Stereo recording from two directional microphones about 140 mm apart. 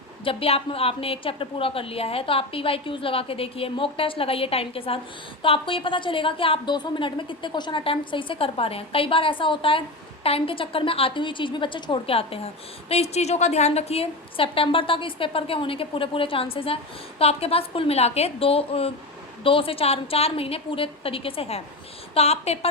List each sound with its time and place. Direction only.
0.3 s a woman's voice: 45° left (ahead or behind)